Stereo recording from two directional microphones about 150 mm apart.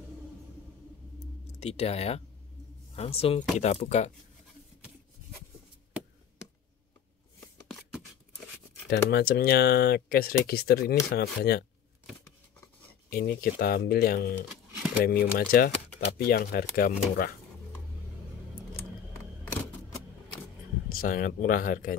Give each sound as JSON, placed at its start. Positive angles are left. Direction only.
{"t": 1.5, "sound": "speech", "side_deg": 45}
{"t": 8.8, "sound": "speech", "side_deg": 90}
{"t": 13.1, "sound": "speech", "side_deg": 80}
{"t": 20.9, "sound": "speech", "side_deg": 70}